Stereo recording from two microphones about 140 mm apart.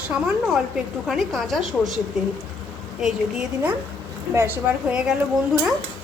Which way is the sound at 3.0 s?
Centre (ahead or behind).